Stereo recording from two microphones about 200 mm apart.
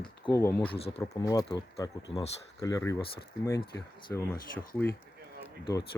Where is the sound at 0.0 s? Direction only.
20° left (ahead or behind).